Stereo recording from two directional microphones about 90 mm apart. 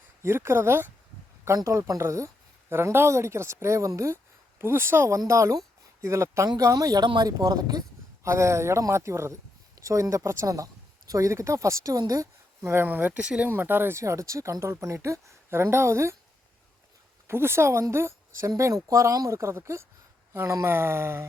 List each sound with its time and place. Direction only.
0.2 s speech: 30° right (ahead or behind)
7.0 s speech: 55° right (ahead or behind)
8.2 s speech: 30° right (ahead or behind)
12.6 s speech: 25° right (ahead or behind)
13.5 s speech: 25° right (ahead or behind)
17.2 s speech: 30° right (ahead or behind)